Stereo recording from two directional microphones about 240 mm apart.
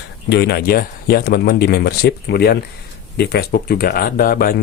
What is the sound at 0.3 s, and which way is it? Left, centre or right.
A man's voice, left.